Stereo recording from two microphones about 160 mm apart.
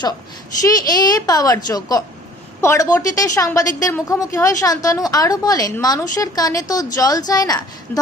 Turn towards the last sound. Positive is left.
turn(degrees=25)  # may be behind; listen again after turning